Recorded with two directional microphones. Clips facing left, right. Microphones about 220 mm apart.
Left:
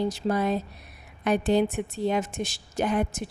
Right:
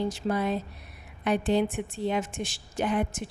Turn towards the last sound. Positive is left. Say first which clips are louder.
# left 2 dB
turn(degrees=40)  # may be behind; listen again after turning